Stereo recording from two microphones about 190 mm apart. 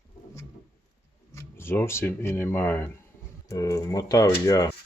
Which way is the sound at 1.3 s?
15° left (ahead or behind).